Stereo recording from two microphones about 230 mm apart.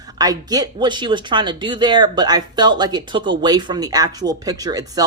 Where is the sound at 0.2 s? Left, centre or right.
Centre.